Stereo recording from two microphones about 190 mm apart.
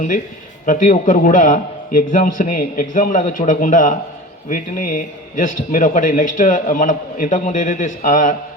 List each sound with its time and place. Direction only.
0.6 s a man's voice: 45° left (ahead or behind)